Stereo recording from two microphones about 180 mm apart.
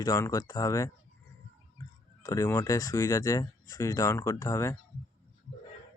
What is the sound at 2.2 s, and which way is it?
Speech, 20° left (ahead or behind).